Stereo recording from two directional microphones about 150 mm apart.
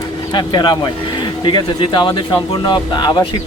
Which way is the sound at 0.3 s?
30° left (ahead or behind).